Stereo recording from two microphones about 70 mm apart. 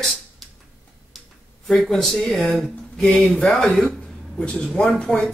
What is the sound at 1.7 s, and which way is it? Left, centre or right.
Speech, centre.